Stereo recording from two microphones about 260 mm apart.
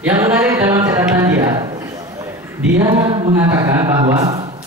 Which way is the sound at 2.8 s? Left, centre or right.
Centre.